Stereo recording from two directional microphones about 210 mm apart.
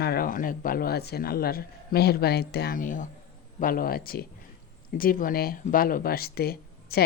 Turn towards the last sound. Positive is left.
turn(degrees=50)  # may be behind; listen again after turning